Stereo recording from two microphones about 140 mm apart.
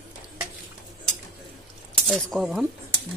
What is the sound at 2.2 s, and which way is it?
Speech, 5° right (ahead or behind).